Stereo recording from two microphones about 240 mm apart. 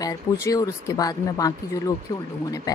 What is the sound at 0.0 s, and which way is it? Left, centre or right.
Speech, centre.